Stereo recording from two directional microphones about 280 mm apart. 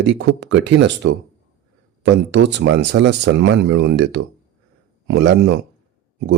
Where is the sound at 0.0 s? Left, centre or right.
Right.